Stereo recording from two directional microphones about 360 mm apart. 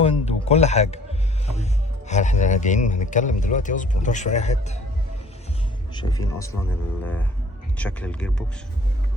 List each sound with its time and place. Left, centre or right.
0.0 s a sound: centre
2.0 s a man's voice: centre
5.9 s speech: centre